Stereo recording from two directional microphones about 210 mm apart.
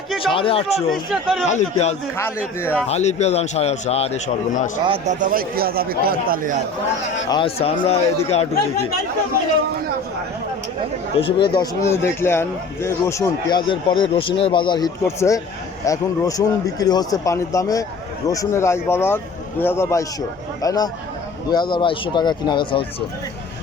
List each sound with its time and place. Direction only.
0.2 s speech: 25° left (ahead or behind)
0.8 s a man's voice: centre (ahead or behind)
1.5 s a man's voice: 35° left (ahead or behind)
5.0 s speech: 40° right (ahead or behind)
7.3 s speech: 25° left (ahead or behind)
11.2 s a man's voice: 25° left (ahead or behind)